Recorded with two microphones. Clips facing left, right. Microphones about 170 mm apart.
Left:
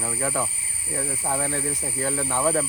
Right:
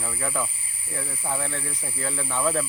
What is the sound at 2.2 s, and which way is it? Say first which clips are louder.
Speech: left 1 dB; 25° left (ahead or behind).